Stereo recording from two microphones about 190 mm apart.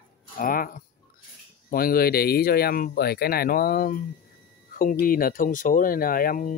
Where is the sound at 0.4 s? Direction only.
45° left (ahead or behind).